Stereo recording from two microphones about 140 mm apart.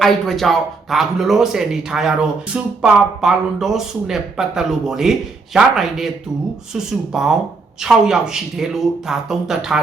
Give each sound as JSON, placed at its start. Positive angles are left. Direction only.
{"t": 0.0, "sound": "speech", "side_deg": 0}